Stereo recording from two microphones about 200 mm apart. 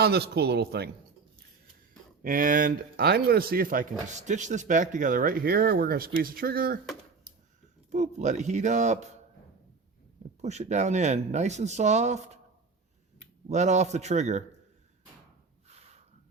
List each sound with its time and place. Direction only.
0.0 s speech: 55° right (ahead or behind)
2.2 s speech: 45° right (ahead or behind)
7.9 s speech: 35° right (ahead or behind)
10.4 s speech: 35° right (ahead or behind)
13.5 s speech: 35° right (ahead or behind)
15.6 s a sound: 30° right (ahead or behind)